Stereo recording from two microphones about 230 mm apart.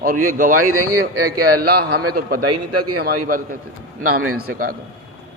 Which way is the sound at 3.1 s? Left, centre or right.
Right.